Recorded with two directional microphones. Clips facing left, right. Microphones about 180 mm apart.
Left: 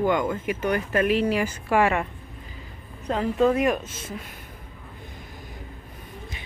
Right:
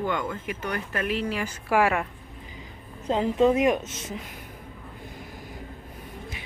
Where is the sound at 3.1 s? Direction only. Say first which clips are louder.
Even; 20° right (ahead or behind).